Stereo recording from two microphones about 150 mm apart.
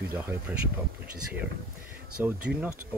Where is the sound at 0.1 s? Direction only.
10° right (ahead or behind).